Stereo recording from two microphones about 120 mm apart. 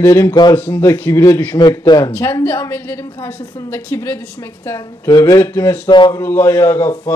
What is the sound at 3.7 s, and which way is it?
A woman's voice, 20° left (ahead or behind).